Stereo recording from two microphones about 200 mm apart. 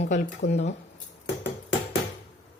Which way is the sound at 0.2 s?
45° left (ahead or behind).